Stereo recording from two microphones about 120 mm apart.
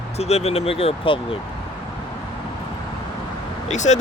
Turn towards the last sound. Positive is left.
turn(degrees=80)